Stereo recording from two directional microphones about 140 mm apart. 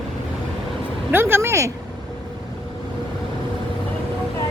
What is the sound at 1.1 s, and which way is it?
Speech, 15° right (ahead or behind).